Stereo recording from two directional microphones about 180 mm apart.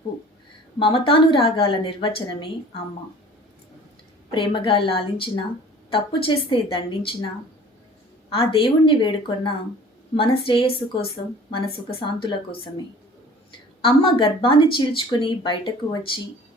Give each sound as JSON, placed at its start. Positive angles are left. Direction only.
{"t": 0.8, "sound": "speech", "side_deg": 30}
{"t": 4.3, "sound": "speech", "side_deg": 25}
{"t": 8.3, "sound": "a woman's voice", "side_deg": 30}
{"t": 13.8, "sound": "speech", "side_deg": 30}